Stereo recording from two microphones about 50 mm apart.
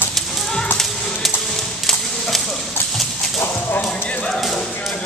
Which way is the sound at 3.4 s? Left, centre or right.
Left.